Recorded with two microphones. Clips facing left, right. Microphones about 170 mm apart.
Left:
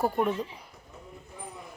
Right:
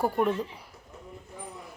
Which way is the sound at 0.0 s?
5° left (ahead or behind).